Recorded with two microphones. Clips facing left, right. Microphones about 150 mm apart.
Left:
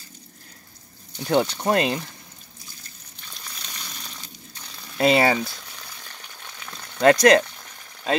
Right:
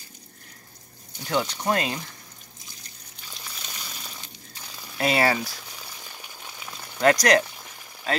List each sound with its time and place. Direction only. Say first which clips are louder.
1.3 s speech: left 4 dB; 30° left (ahead or behind)
3.5 s water: left 1 dB; 5° right (ahead or behind)
4.9 s speech: left 4 dB; 25° left (ahead or behind)
5.4 s boiling: left 3 dB; 10° right (ahead or behind)
7.1 s speech: left 4 dB; 25° left (ahead or behind)
7.4 s boiling: right 1 dB; 10° right (ahead or behind)